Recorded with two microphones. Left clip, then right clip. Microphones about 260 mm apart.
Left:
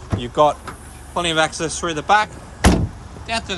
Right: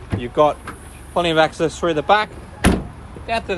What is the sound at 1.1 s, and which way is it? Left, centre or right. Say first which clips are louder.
Speech: right 2 dB; centre.